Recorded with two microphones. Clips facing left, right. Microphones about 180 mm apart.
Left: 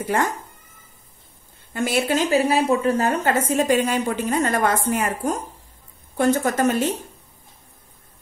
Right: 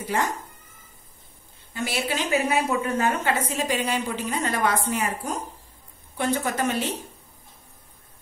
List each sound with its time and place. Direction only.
1.7 s a woman's voice: 50° left (ahead or behind)